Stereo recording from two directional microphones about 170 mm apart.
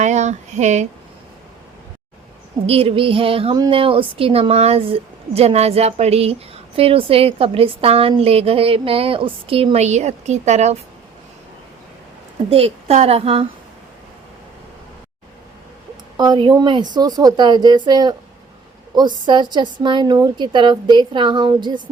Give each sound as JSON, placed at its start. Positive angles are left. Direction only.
{"t": 0.0, "sound": "a sound", "side_deg": -45}
{"t": 2.6, "sound": "a woman's voice", "side_deg": -35}
{"t": 12.5, "sound": "a woman's voice", "side_deg": -35}
{"t": 16.1, "sound": "a woman's voice", "side_deg": -25}